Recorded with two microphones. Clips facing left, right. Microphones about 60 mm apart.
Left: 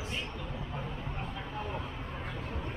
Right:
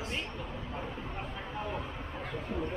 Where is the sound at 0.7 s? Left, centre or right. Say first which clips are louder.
Right 1 dB; centre.